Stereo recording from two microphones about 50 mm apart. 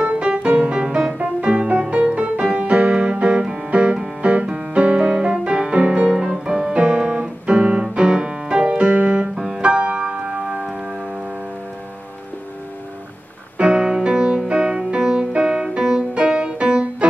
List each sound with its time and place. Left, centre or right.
0.0 s music: right; by 6.8 s centre
6.8 s piano: centre
9.6 s music: right
13.6 s music: centre